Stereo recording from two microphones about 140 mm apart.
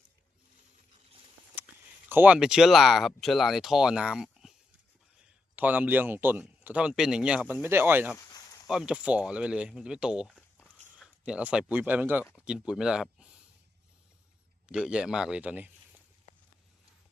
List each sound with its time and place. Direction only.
1.5 s speech: 15° right (ahead or behind)
5.5 s speech: 15° right (ahead or behind)
8.1 s speech: 25° left (ahead or behind)
8.6 s speech: 5° right (ahead or behind)
14.7 s speech: 5° right (ahead or behind)